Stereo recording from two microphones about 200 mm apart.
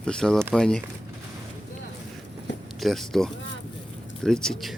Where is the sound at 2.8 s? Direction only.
Centre (ahead or behind).